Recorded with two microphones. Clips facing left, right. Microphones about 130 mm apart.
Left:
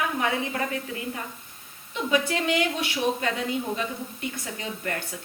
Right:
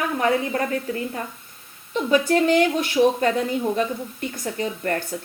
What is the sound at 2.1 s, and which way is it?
A woman's voice, 40° right (ahead or behind).